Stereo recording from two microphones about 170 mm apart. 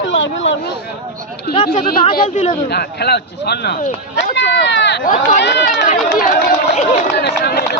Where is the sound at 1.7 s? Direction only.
60° left (ahead or behind).